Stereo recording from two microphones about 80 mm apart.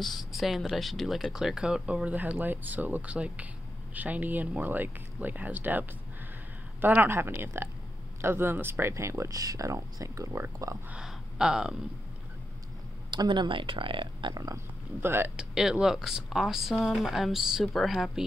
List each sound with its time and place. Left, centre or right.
0.0 s speech: centre; by 9.4 s right
9.4 s speech: right
10.9 s speech: centre
13.1 s speech: right
14.3 s speech: right
15.0 s speech: right
15.3 s speech: centre